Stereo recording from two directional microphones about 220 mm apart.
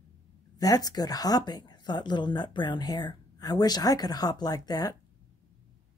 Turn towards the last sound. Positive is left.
turn(degrees=15)  # may be behind; listen again after turning